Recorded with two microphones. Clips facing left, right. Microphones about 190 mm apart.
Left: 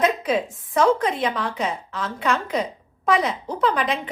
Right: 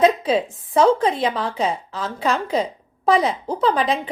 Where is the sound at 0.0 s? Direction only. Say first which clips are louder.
Right 4 dB; 30° right (ahead or behind).